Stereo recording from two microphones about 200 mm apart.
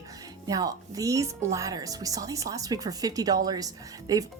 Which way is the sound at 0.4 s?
20° right (ahead or behind).